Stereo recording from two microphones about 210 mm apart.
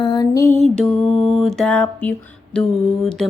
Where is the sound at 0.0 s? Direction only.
20° left (ahead or behind).